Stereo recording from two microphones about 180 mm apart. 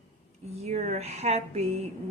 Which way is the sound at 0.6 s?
40° right (ahead or behind).